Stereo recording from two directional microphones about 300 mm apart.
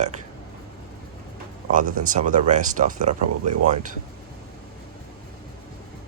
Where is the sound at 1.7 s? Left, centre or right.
Right.